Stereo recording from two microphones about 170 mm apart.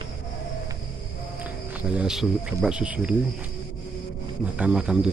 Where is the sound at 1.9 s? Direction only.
5° right (ahead or behind).